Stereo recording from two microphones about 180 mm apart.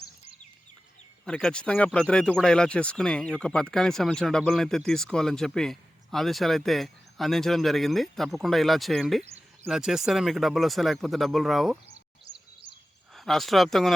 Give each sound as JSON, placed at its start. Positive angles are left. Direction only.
{"t": 1.2, "sound": "speech", "side_deg": 5}
{"t": 13.1, "sound": "speech", "side_deg": 0}